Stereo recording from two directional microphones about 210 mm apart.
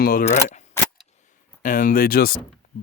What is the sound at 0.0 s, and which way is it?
Speech, 40° left (ahead or behind).